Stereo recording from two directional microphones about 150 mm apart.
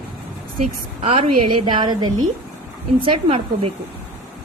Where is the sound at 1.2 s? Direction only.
30° right (ahead or behind).